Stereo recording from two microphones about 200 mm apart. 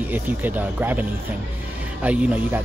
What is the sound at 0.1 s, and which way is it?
Speech, 10° right (ahead or behind).